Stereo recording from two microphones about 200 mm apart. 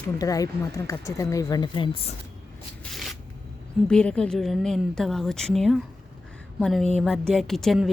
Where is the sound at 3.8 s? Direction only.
5° left (ahead or behind).